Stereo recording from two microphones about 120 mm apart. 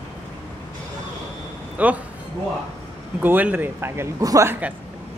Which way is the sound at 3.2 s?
15° right (ahead or behind).